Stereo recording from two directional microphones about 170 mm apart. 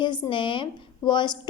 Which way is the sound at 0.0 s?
25° left (ahead or behind).